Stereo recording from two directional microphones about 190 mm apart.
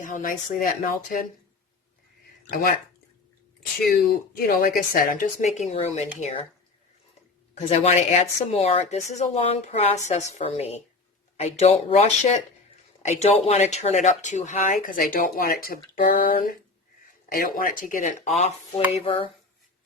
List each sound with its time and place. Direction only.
0.0 s speech: 45° left (ahead or behind)
4.4 s speech: 50° left (ahead or behind)
7.5 s speech: 35° left (ahead or behind)